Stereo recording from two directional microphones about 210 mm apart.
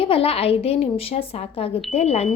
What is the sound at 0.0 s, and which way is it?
Speech, 25° left (ahead or behind).